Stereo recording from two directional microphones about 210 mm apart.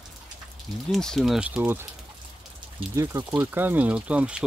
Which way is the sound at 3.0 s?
15° right (ahead or behind).